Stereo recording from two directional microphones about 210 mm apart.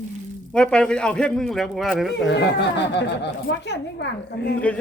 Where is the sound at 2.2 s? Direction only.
55° left (ahead or behind).